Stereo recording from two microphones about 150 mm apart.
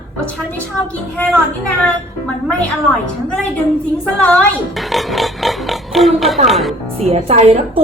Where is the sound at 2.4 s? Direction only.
5° left (ahead or behind).